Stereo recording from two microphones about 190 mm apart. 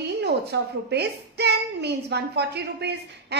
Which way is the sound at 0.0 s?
60° right (ahead or behind).